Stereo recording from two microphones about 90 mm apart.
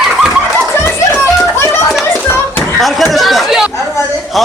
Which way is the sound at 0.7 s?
25° left (ahead or behind).